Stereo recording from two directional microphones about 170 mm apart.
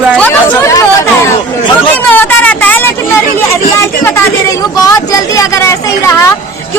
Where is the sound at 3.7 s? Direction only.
15° left (ahead or behind).